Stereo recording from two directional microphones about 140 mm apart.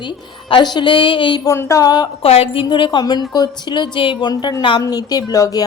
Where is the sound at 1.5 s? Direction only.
20° left (ahead or behind).